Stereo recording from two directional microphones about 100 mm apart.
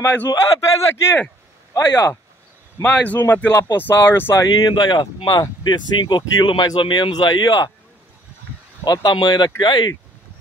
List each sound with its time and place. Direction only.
0.0 s a man's voice: 20° left (ahead or behind)
0.3 s a man's voice: 30° left (ahead or behind)
2.8 s a man's voice: 15° left (ahead or behind)
4.6 s speech: 45° left (ahead or behind)
8.8 s speech: 45° left (ahead or behind)